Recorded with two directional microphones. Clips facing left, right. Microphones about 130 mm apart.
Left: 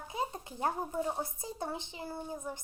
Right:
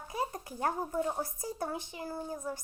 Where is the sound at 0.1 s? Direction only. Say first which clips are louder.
Right 1 dB; 20° left (ahead or behind).